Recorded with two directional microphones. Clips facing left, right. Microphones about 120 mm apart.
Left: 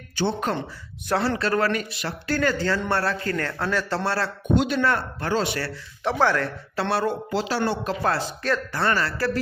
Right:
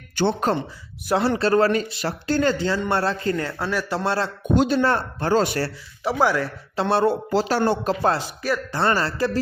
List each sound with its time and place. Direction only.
0.5 s a man's voice: 35° right (ahead or behind); by 4.3 s 20° right (ahead or behind)
4.5 s speech: 35° right (ahead or behind)
5.3 s speech: 40° right (ahead or behind)
6.0 s a man's voice: 10° right (ahead or behind)
6.9 s speech: 30° right (ahead or behind)
7.3 s speech: 45° right (ahead or behind)
8.0 s speech: 20° right (ahead or behind)
8.4 s a man's voice: 10° right (ahead or behind)
8.7 s speech: 30° right (ahead or behind)